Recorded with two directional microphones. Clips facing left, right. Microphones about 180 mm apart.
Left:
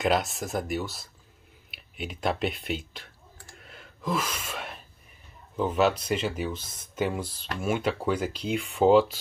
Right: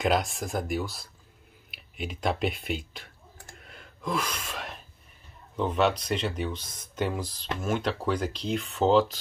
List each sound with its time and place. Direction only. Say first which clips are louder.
0.0 s speech: even; centre (ahead or behind)
3.5 s gasp: even; centre (ahead or behind)
5.6 s speech: left 1 dB; 5° left (ahead or behind)